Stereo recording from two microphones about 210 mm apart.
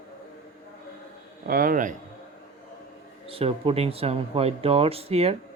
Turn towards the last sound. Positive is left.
turn(degrees=-30)  # may be behind; listen again after turning